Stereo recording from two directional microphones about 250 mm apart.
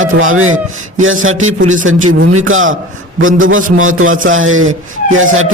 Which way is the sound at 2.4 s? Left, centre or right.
Right.